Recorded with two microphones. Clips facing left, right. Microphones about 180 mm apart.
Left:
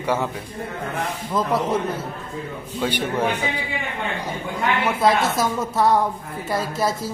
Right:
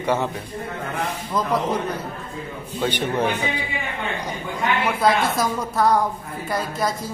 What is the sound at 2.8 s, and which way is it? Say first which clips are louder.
Speech: even; 10° left (ahead or behind).